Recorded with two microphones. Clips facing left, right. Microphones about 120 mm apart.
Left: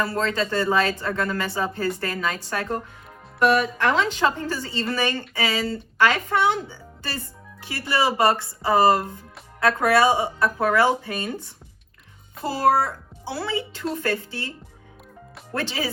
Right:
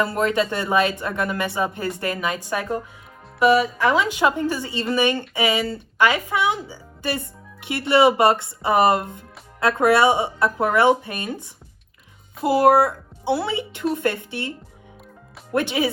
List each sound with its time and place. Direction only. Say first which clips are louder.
0.0 s speech: right 3 dB; 20° right (ahead or behind)
7.6 s speech: right 7 dB; 25° right (ahead or behind)
12.5 s speech: right 5 dB; 20° right (ahead or behind)